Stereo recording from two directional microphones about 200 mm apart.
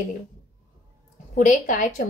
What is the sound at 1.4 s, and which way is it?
Speech, 40° left (ahead or behind).